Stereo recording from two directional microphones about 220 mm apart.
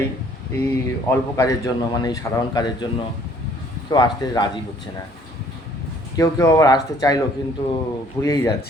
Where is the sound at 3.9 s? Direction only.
20° left (ahead or behind).